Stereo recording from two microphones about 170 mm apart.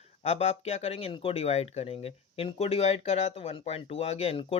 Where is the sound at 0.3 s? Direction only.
40° left (ahead or behind).